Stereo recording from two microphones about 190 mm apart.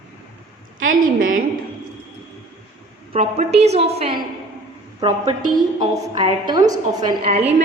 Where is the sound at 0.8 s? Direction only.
45° right (ahead or behind).